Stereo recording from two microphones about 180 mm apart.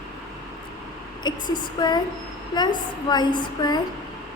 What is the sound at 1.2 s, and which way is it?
Female singing, 25° left (ahead or behind).